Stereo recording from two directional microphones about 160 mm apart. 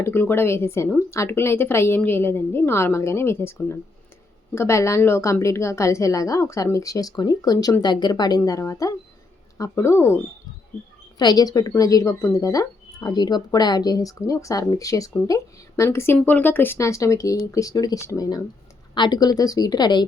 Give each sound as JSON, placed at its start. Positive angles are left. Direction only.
{"t": 0.0, "sound": "a woman's voice", "side_deg": 15}
{"t": 11.2, "sound": "a woman's voice", "side_deg": 25}